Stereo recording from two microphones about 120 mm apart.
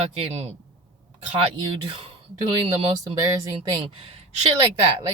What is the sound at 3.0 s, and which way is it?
Speech, 30° right (ahead or behind).